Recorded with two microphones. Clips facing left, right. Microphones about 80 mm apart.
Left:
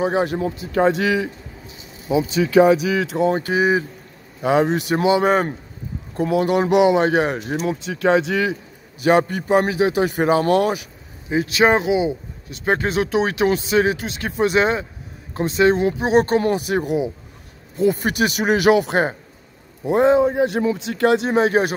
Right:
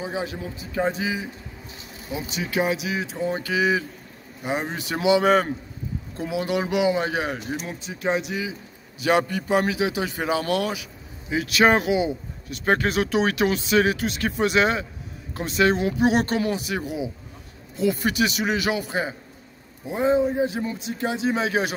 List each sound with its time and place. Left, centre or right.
0.0 s a man's voice: left
3.0 s speech: left
3.3 s speech: left
4.6 s speech: left
4.8 s speech: left
6.1 s speech: left
7.6 s speech: left
9.0 s speech: left
11.2 s speech: left
19.9 s speech: left
21.4 s speech: left